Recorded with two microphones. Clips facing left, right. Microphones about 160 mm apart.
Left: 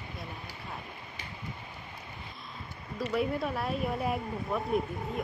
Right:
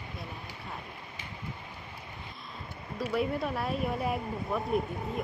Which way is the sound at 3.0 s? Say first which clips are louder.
Even; centre (ahead or behind).